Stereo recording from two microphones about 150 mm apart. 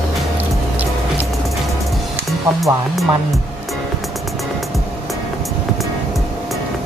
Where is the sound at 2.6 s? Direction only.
Centre (ahead or behind).